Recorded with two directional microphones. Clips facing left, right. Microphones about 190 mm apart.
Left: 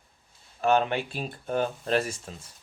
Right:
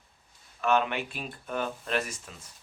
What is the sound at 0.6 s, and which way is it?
Speech, 35° left (ahead or behind).